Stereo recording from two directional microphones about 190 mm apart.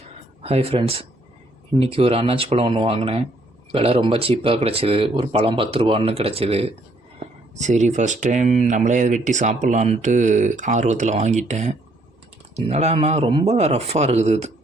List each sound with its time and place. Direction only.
0.4 s speech: 30° right (ahead or behind)